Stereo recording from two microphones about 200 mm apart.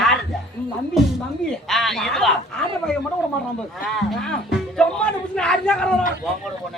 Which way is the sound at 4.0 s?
Centre (ahead or behind).